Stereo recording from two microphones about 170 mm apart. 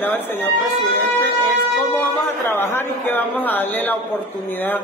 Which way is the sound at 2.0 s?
15° left (ahead or behind).